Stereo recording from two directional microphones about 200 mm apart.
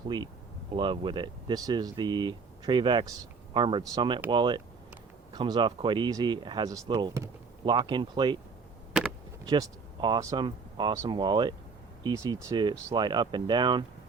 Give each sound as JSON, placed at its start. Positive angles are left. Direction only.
{"t": 0.7, "sound": "speech", "side_deg": -25}
{"t": 8.9, "sound": "a sound", "side_deg": -5}
{"t": 9.5, "sound": "speech", "side_deg": -20}